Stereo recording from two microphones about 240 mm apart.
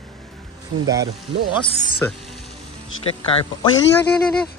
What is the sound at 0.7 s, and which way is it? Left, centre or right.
Speech, right.